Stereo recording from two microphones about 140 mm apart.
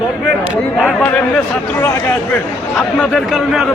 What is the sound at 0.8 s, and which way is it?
A man's voice, 10° left (ahead or behind).